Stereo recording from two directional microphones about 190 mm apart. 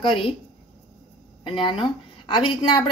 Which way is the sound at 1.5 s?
25° left (ahead or behind).